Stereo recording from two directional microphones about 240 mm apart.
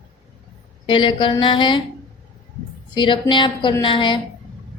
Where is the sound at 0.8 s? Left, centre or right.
Centre.